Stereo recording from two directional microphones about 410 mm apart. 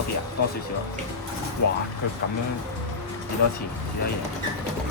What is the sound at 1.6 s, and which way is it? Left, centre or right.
Speech, left.